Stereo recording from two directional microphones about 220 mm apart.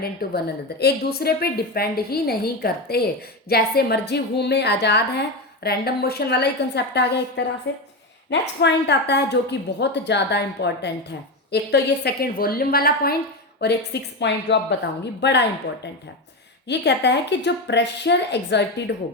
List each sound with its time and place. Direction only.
0.0 s speech: 45° left (ahead or behind)